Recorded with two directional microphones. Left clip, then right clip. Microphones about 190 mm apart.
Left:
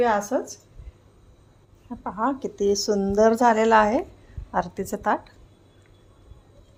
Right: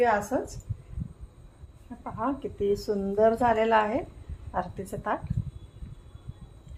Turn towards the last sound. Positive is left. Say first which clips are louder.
# left 7 dB
turn(degrees=50)  # may be behind; listen again after turning